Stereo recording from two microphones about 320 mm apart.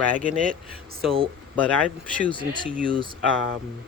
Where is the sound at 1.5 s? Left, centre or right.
Centre.